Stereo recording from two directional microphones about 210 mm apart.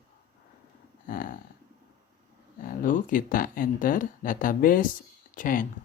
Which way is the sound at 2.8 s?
40° left (ahead or behind).